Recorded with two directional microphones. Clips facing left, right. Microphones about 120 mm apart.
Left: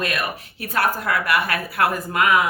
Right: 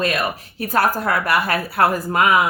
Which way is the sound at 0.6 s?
40° right (ahead or behind).